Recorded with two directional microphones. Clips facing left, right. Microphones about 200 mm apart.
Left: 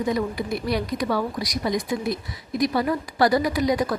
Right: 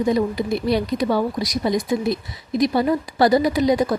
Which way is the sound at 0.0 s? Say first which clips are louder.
Right 5 dB; 25° right (ahead or behind).